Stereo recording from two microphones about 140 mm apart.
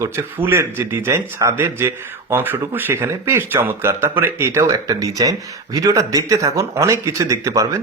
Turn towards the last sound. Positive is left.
turn(degrees=-20)  # may be behind; listen again after turning